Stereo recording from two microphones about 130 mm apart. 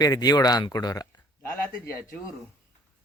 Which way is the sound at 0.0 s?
30° left (ahead or behind).